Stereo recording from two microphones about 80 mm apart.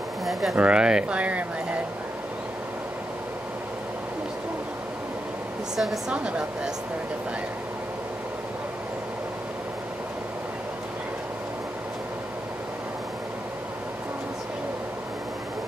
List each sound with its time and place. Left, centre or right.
0.2 s speech: centre
0.6 s speech: centre
5.8 s speech: centre
6.1 s speech: centre